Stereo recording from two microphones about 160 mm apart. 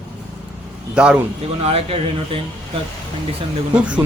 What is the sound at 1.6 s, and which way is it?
Speech, 40° right (ahead or behind).